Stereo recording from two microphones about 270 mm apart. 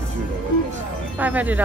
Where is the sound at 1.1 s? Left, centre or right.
Centre.